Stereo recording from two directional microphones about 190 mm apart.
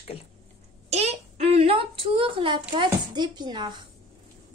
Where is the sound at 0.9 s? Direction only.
35° right (ahead or behind).